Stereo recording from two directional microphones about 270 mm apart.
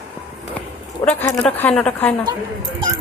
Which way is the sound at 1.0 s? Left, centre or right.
Centre.